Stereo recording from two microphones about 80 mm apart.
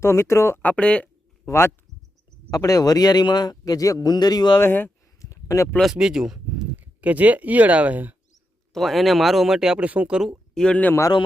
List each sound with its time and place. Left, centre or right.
0.0 s speech: left
0.6 s speech: centre
1.5 s speech: left
2.5 s speech: left
3.6 s speech: left
4.6 s speech: left
5.2 s a sound: left
5.8 s speech: centre
8.7 s speech: centre
10.5 s speech: centre